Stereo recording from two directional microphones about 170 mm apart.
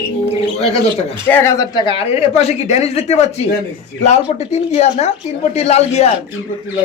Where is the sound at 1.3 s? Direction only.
15° left (ahead or behind); by 6.1 s 40° left (ahead or behind).